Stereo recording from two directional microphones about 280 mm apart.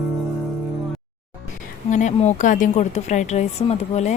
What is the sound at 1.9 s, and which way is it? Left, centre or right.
A woman's voice, left.